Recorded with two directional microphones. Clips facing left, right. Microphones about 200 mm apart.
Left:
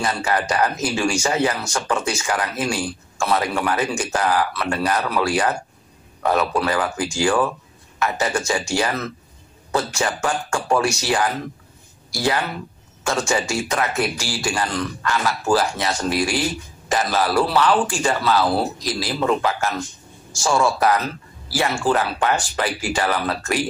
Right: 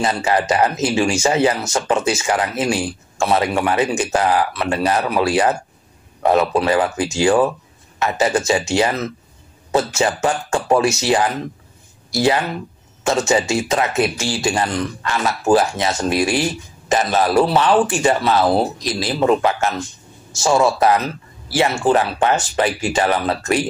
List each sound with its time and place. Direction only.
0.0 s speech: 25° right (ahead or behind)